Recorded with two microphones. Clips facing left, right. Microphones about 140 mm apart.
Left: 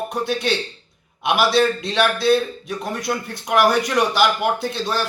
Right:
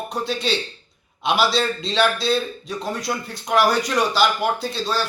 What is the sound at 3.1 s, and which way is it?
Speech, 5° right (ahead or behind).